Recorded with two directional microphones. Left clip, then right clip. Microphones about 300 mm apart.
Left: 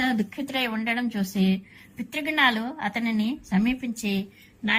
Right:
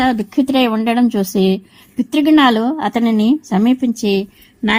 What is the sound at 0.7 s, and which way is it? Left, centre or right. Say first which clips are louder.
Speech: right 12 dB; right.